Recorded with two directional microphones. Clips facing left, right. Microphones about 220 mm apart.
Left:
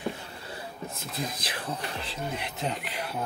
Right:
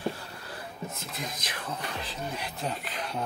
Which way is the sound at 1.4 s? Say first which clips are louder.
Left 2 dB; 30° left (ahead or behind).